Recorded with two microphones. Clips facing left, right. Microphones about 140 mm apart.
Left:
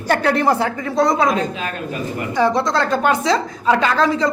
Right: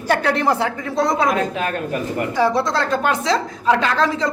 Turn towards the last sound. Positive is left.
turn(degrees=0)  # may be behind; listen again after turning